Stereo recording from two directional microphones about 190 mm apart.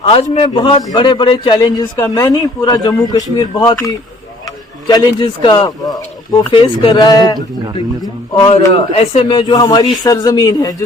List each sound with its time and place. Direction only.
0.0 s speech: 30° left (ahead or behind)